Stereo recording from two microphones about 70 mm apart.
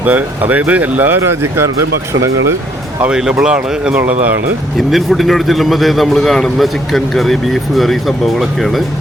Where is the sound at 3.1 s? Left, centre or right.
Centre.